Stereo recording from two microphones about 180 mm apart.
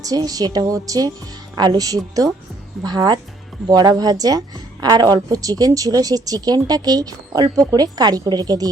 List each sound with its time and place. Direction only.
0.0 s a woman's voice: 20° right (ahead or behind)